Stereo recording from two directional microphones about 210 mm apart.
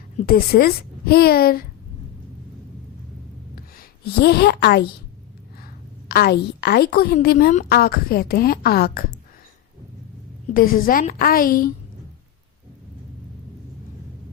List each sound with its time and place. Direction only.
0.2 s a woman's voice: 45° left (ahead or behind)
3.5 s a sound: 45° left (ahead or behind)
6.1 s a woman's voice: 50° left (ahead or behind)
10.5 s a woman's voice: 40° left (ahead or behind)